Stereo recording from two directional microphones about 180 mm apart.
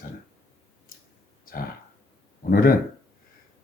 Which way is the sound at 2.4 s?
55° left (ahead or behind).